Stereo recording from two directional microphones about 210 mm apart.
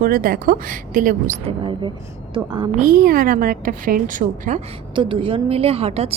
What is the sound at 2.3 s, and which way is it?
Speech, 25° right (ahead or behind).